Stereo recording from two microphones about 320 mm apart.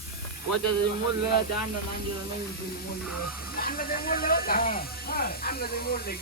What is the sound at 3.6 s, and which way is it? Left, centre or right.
Speech, left.